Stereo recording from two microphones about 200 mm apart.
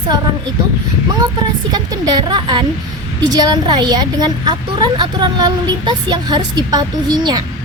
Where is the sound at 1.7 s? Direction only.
20° right (ahead or behind).